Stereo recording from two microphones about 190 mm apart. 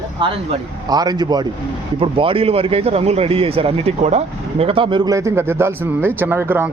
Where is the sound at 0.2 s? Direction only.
25° right (ahead or behind).